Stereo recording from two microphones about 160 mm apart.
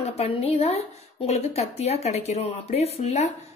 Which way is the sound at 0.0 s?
40° left (ahead or behind).